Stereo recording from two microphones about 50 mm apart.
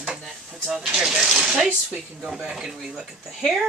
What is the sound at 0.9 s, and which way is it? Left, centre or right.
Speech, centre.